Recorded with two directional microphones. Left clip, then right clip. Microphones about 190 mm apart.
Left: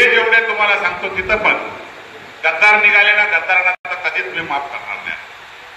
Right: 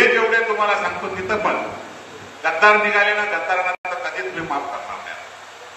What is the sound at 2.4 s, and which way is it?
Speech, 20° left (ahead or behind).